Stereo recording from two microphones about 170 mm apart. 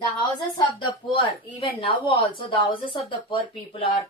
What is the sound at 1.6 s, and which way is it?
Speech, 30° left (ahead or behind).